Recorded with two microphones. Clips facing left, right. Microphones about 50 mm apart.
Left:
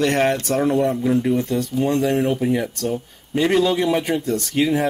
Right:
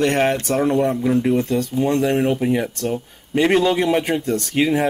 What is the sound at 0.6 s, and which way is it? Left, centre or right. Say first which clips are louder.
Speech: right 1 dB; centre.